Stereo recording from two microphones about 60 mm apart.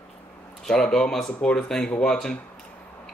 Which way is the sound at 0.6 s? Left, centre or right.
Centre.